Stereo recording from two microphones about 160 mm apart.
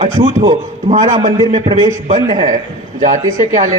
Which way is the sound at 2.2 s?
25° right (ahead or behind).